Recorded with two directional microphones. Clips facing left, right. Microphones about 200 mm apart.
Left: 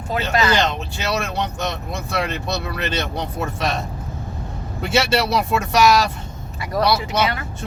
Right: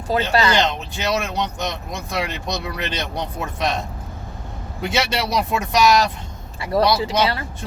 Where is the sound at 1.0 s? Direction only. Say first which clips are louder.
Right 1 dB; 15° right (ahead or behind).